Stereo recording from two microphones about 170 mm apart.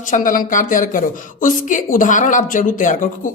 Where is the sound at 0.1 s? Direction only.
50° left (ahead or behind).